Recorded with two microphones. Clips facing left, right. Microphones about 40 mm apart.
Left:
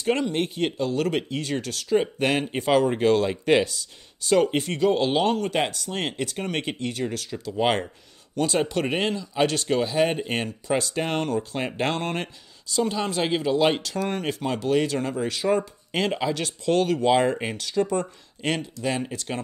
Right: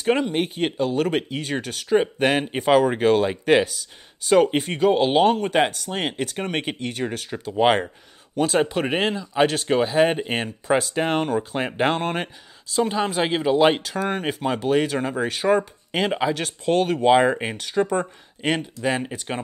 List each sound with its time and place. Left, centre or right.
0.0 s speech: centre
15.9 s speech: centre